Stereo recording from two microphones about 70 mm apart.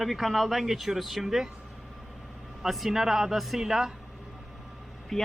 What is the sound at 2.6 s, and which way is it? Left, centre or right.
Speech, centre.